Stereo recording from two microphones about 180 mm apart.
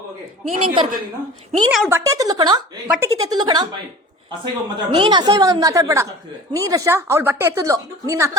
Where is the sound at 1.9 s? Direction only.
15° right (ahead or behind).